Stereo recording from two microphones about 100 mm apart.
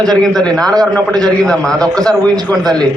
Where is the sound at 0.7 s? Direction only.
40° right (ahead or behind).